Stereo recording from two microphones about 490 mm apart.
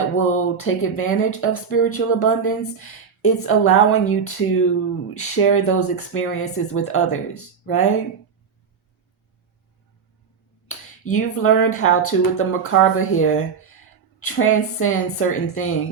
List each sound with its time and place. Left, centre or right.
0.2 s speech: left
11.0 s speech: left